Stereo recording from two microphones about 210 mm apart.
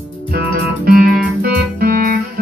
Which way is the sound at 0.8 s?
45° right (ahead or behind).